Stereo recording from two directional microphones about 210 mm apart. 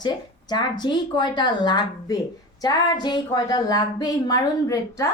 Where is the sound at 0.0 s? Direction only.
20° left (ahead or behind).